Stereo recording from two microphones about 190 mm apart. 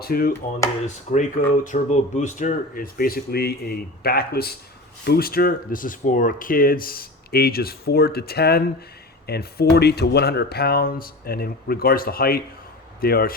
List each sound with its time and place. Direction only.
0.0 s speech: 50° left (ahead or behind)
1.1 s speech: 35° left (ahead or behind); by 13.3 s 50° left (ahead or behind)